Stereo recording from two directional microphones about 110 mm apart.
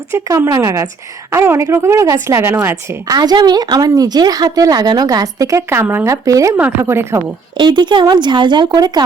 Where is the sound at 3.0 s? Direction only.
35° right (ahead or behind).